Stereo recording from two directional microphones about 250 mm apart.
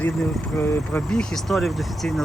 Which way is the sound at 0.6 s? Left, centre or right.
Centre.